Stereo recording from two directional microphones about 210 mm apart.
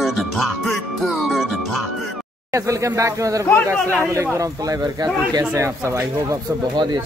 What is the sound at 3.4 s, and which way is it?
Speech, 15° left (ahead or behind).